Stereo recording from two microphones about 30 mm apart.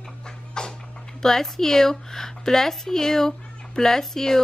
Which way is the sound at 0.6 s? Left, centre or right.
Left.